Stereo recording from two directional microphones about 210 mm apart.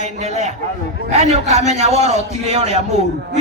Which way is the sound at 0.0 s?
30° right (ahead or behind).